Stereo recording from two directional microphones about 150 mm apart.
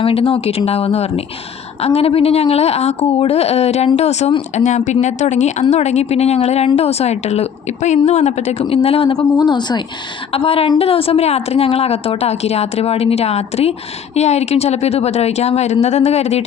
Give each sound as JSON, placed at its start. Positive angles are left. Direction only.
{"t": 0.0, "sound": "a woman's voice", "side_deg": 35}
{"t": 9.1, "sound": "speech", "side_deg": 25}
{"t": 10.3, "sound": "a woman's voice", "side_deg": 40}